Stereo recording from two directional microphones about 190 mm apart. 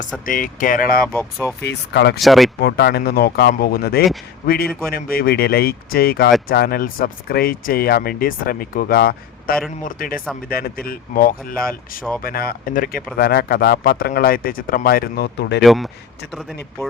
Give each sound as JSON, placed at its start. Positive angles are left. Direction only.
{"t": 0.0, "sound": "speech", "side_deg": 45}
{"t": 1.0, "sound": "speech", "side_deg": 10}
{"t": 1.6, "sound": "speech", "side_deg": 65}
{"t": 2.1, "sound": "speech", "side_deg": 0}
{"t": 2.6, "sound": "speech", "side_deg": 60}
{"t": 15.6, "sound": "speech", "side_deg": 0}